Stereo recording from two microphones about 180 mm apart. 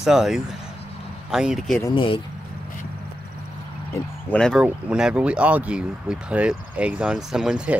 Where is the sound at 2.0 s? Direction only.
30° left (ahead or behind).